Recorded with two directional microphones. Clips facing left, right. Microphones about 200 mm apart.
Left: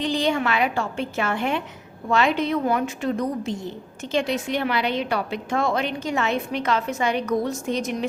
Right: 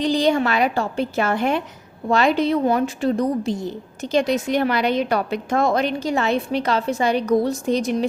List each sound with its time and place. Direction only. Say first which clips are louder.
0.0 s a woman's voice: right 4 dB; 35° right (ahead or behind)